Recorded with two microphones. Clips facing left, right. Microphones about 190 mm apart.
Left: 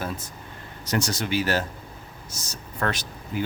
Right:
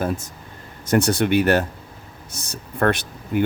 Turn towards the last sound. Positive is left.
turn(degrees=-60)  # may be behind; listen again after turning